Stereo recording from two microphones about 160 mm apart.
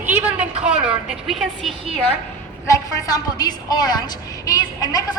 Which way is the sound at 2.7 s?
25° left (ahead or behind).